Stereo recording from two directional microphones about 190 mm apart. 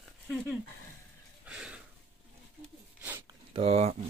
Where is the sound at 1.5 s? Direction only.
5° right (ahead or behind).